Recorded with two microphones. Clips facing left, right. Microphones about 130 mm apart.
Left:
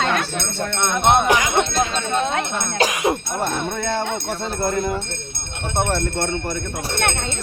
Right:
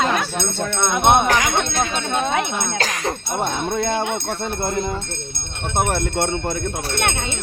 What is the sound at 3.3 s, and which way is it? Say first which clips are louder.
Speech: right 2 dB; 15° right (ahead or behind).